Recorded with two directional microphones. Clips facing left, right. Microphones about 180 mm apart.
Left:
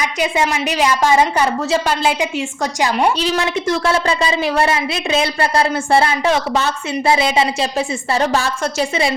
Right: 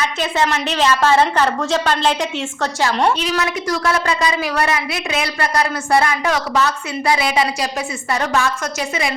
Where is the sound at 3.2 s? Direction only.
30° left (ahead or behind).